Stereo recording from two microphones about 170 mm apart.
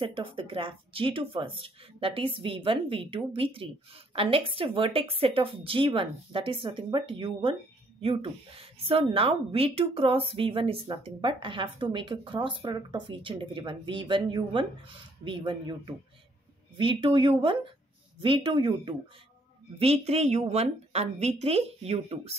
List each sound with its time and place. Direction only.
0.0 s speech: 30° right (ahead or behind)